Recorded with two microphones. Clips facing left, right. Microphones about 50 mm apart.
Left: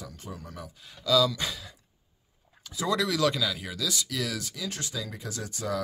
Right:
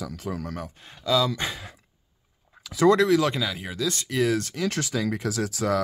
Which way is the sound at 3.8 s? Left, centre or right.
Right.